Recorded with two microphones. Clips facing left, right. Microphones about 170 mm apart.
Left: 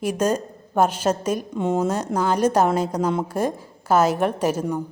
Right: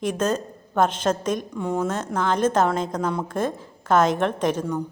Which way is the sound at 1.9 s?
10° left (ahead or behind).